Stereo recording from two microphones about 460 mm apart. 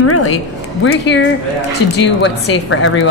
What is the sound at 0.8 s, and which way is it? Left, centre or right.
A woman's voice, left.